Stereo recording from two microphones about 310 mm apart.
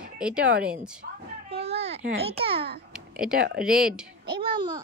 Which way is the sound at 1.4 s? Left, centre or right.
Centre.